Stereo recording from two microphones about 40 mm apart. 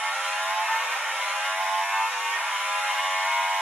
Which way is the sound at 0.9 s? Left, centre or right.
Right.